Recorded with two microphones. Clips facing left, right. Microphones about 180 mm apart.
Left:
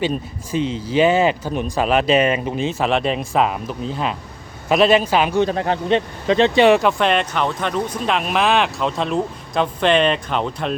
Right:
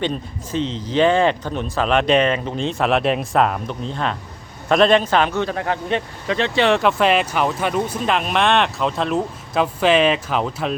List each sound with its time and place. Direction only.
0.0 s speech: 10° left (ahead or behind)
5.5 s speech: 25° left (ahead or behind)
6.7 s speech: 5° left (ahead or behind)